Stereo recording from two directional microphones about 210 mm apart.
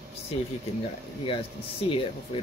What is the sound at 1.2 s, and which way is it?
Speech, 25° left (ahead or behind).